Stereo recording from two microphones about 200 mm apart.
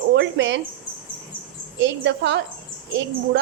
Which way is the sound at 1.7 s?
65° right (ahead or behind).